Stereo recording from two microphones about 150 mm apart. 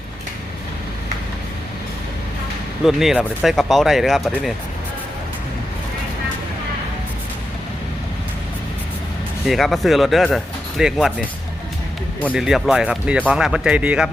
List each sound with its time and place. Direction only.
2.8 s speech: centre (ahead or behind)
9.5 s speech: centre (ahead or behind)
12.3 s speech: 5° right (ahead or behind)